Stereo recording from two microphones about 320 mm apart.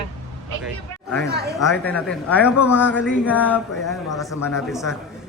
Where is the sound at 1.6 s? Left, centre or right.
Centre.